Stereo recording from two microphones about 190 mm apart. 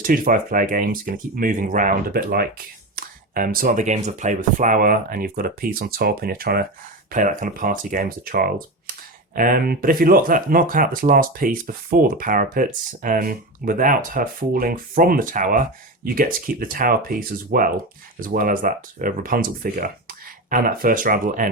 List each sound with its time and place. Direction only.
0.0 s speech: 45° right (ahead or behind)